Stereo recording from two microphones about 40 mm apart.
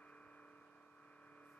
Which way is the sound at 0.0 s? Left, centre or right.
Left.